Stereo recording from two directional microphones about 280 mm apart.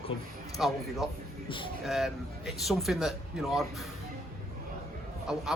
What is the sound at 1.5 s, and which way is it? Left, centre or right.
Speech, centre.